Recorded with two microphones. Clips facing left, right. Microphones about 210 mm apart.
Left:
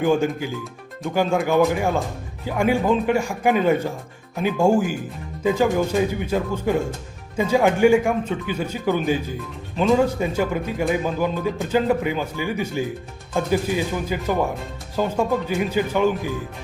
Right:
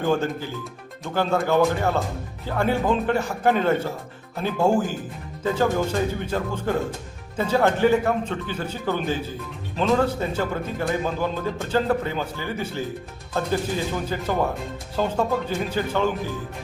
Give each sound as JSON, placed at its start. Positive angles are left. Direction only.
{"t": 0.0, "sound": "speech", "side_deg": 10}
{"t": 9.7, "sound": "speech", "side_deg": 0}